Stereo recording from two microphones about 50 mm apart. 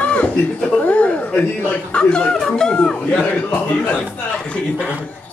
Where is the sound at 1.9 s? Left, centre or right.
Centre.